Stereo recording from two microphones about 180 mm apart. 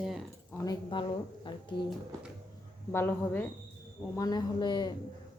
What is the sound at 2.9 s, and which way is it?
A woman's voice, 10° left (ahead or behind).